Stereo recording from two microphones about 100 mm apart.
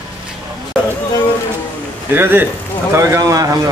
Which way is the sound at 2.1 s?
20° right (ahead or behind).